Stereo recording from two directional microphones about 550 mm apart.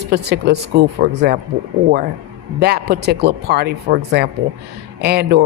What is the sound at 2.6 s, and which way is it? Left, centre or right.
A man's voice, centre.